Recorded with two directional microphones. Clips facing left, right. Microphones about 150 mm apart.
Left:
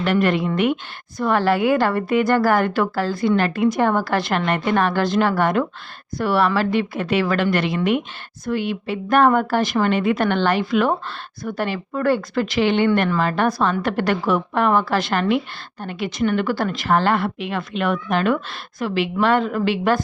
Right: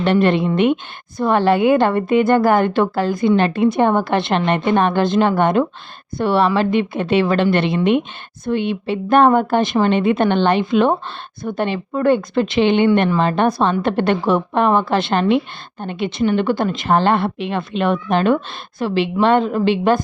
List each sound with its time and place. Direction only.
0.0 s a woman's voice: 25° right (ahead or behind)